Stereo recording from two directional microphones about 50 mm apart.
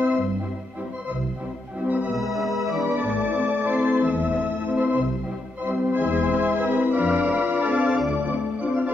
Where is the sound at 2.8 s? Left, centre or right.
Right.